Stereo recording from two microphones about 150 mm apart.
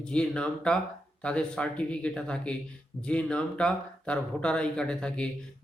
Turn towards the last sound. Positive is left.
turn(degrees=5)  # may be behind; listen again after turning